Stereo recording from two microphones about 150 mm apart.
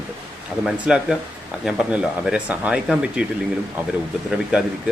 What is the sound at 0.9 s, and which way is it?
Speech, 5° right (ahead or behind).